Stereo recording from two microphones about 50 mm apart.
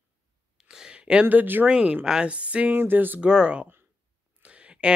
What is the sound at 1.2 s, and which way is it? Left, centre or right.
Speech, right.